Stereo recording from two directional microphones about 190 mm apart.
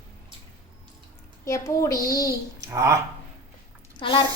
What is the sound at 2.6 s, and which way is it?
Speech, 15° right (ahead or behind).